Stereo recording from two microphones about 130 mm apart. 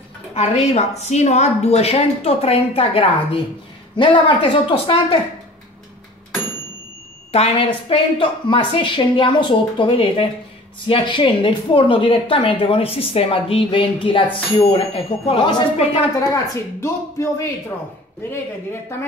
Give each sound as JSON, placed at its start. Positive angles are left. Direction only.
{"t": 0.3, "sound": "a woman's voice", "side_deg": 55}
{"t": 7.3, "sound": "a woman's voice", "side_deg": 50}
{"t": 16.8, "sound": "a woman's voice", "side_deg": 20}